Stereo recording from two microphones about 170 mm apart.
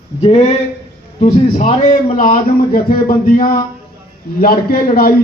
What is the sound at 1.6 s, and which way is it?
A man's voice, 45° left (ahead or behind).